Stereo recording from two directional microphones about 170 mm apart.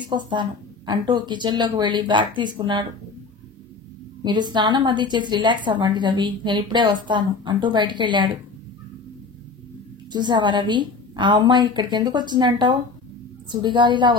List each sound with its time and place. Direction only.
0.3 s a woman's voice: 25° right (ahead or behind)
4.2 s a woman's voice: 25° right (ahead or behind)
10.1 s a woman's voice: 25° right (ahead or behind)